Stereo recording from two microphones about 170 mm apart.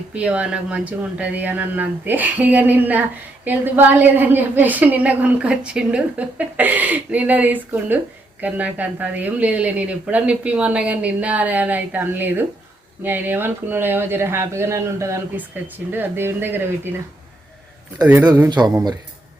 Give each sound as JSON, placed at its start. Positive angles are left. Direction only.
{"t": 0.1, "sound": "speech", "side_deg": -5}
{"t": 17.9, "sound": "speech", "side_deg": -10}
{"t": 18.4, "sound": "a man's voice", "side_deg": -25}